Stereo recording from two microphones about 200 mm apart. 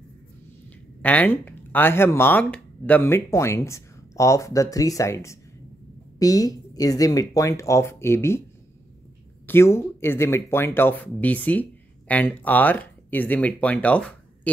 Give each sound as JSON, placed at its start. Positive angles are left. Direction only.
{"t": 1.0, "sound": "speech", "side_deg": 10}
{"t": 9.5, "sound": "speech", "side_deg": 10}